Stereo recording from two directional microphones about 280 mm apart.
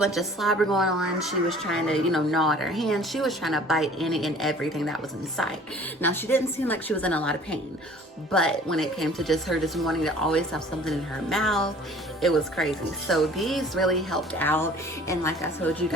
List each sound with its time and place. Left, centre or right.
0.0 s a woman's voice: centre